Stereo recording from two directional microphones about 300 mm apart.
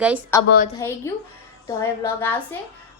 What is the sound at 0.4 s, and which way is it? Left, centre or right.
Speech, left.